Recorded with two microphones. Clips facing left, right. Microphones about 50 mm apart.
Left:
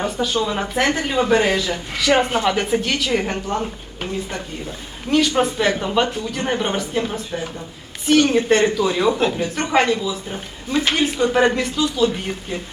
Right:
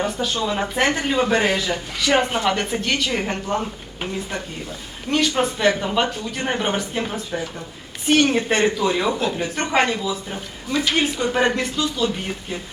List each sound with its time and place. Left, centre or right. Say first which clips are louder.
0.0 s speech: left 2 dB; centre
8.0 s speech: left 2 dB; centre
8.4 s speech: left 3 dB; centre